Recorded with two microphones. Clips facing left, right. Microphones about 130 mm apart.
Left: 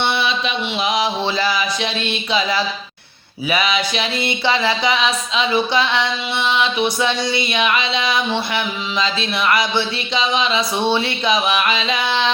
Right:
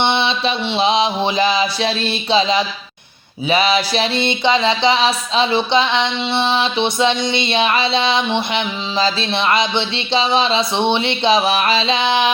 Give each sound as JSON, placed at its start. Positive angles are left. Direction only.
{"t": 0.0, "sound": "mantra", "side_deg": -25}
{"t": 1.8, "sound": "music", "side_deg": -30}